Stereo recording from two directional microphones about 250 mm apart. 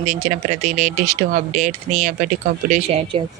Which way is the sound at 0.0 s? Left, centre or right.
Right.